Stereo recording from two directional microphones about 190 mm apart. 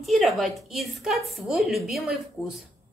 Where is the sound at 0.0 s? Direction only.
Centre (ahead or behind).